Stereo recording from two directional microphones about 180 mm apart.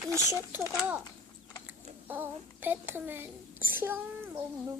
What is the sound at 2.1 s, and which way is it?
Child singing, 10° right (ahead or behind).